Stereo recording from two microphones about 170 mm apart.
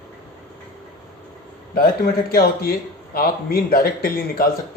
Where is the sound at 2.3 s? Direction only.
65° left (ahead or behind).